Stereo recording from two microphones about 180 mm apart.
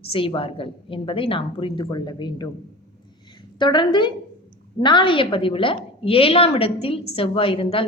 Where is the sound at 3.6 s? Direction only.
25° left (ahead or behind).